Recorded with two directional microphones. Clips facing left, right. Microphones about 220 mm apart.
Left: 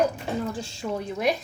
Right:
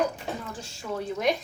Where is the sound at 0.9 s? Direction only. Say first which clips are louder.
Even; 5° left (ahead or behind).